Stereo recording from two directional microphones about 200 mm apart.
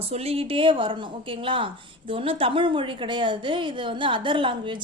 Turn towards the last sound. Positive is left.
turn(degrees=-25)  # may be behind; listen again after turning